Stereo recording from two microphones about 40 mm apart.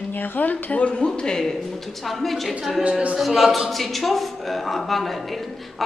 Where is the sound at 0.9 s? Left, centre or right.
Left.